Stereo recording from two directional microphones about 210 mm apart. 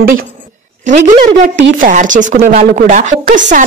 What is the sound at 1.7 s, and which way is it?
A woman's voice, 40° right (ahead or behind).